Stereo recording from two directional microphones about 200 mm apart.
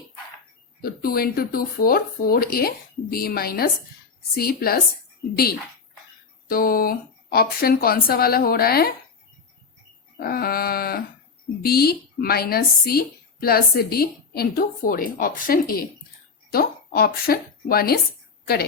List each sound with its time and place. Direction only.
0.8 s a woman's voice: 50° left (ahead or behind)
6.5 s a woman's voice: 45° left (ahead or behind)
10.2 s a woman's voice: 50° left (ahead or behind)